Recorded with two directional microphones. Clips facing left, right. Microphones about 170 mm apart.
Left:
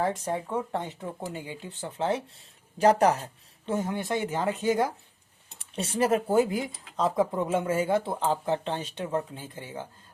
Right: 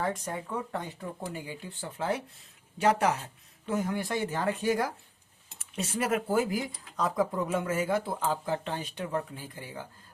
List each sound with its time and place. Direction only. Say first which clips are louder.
0.0 s speech: left 4 dB; 30° left (ahead or behind)
2.7 s speech: left 5 dB; 35° left (ahead or behind)
3.7 s speech: left 2 dB; 25° left (ahead or behind)